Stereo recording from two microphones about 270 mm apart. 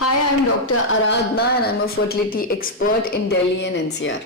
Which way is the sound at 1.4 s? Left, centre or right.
Left.